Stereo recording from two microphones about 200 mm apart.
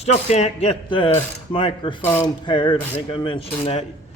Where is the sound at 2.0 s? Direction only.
10° left (ahead or behind).